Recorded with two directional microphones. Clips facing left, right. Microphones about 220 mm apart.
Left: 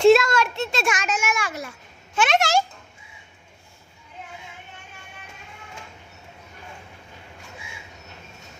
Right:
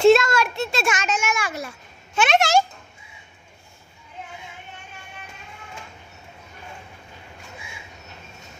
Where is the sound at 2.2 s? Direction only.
25° right (ahead or behind).